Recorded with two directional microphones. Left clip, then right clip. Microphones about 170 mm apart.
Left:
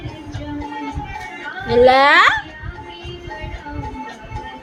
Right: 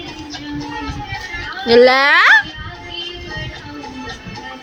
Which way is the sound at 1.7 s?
20° right (ahead or behind).